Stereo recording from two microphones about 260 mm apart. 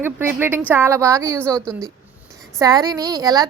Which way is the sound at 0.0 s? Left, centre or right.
Centre.